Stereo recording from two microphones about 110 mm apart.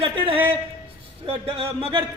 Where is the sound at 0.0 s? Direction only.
55° right (ahead or behind).